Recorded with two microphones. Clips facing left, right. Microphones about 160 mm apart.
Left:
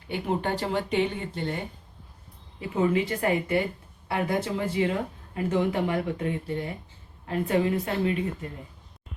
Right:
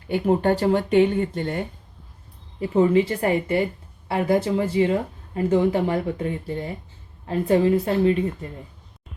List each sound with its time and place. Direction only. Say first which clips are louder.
0.1 s speech: right 8 dB; 45° right (ahead or behind)
2.6 s speech: right 7 dB; 35° right (ahead or behind)